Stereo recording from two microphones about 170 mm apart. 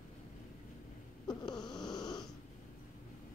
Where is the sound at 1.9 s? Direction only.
25° left (ahead or behind).